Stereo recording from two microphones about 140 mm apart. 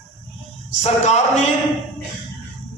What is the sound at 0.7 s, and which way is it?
Speech, 55° left (ahead or behind).